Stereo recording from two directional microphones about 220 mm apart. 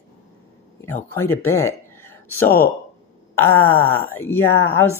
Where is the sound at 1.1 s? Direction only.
10° left (ahead or behind).